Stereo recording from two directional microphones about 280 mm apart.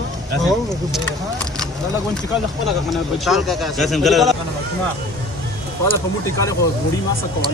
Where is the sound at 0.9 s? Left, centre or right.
Centre.